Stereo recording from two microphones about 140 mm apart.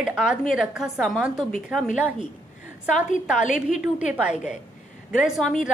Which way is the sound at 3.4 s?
60° left (ahead or behind).